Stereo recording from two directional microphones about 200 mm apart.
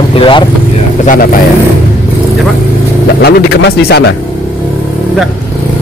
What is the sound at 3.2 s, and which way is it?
Speech, 55° left (ahead or behind).